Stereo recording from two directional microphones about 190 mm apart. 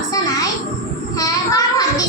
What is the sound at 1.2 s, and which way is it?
Child singing, 20° left (ahead or behind).